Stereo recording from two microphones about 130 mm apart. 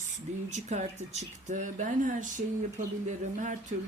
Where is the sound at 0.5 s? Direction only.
65° right (ahead or behind).